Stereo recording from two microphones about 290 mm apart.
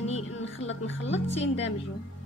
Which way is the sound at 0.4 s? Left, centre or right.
Left.